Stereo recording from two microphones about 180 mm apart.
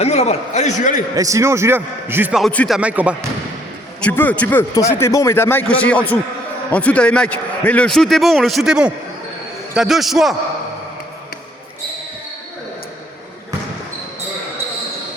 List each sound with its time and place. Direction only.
0.0 s a man's voice: 35° left (ahead or behind)
1.1 s a man's voice: 20° right (ahead or behind)
2.4 s a man's voice: 5° left (ahead or behind)
2.7 s a man's voice: 10° right (ahead or behind)
4.0 s a man's voice: 10° left (ahead or behind)